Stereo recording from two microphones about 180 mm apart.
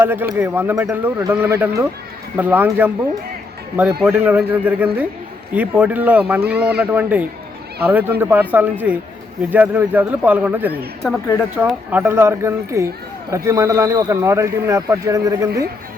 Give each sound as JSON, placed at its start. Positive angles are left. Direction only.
{"t": 0.0, "sound": "a man's voice", "side_deg": -10}
{"t": 4.0, "sound": "a man's voice", "side_deg": -10}